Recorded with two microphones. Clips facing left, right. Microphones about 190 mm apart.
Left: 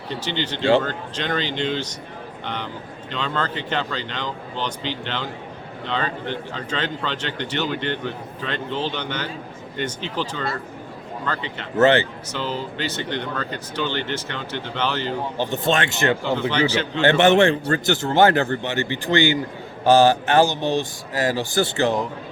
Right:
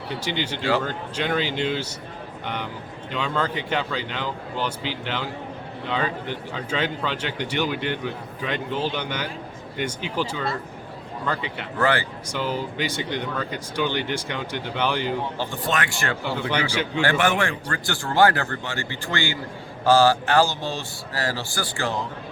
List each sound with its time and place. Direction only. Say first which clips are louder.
0.1 s speech: left 1 dB; 10° right (ahead or behind)
3.1 s speech: even; 10° right (ahead or behind)
11.8 s a man's voice: left 7 dB; 25° left (ahead or behind)
12.3 s speech: right 3 dB; 10° right (ahead or behind)
15.4 s a man's voice: left 5 dB; 20° left (ahead or behind)
16.5 s speech: left 2 dB; 10° right (ahead or behind)
17.0 s a man's voice: left 7 dB; 25° left (ahead or behind)